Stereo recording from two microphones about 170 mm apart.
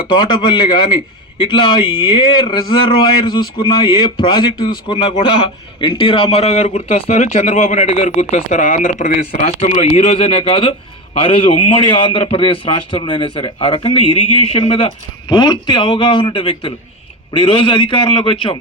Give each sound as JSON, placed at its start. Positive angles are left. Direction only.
{"t": 0.1, "sound": "speech", "side_deg": 25}